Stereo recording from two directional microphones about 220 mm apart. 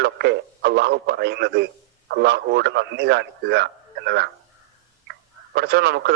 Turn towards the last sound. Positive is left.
turn(degrees=-50)  # may be behind; listen again after turning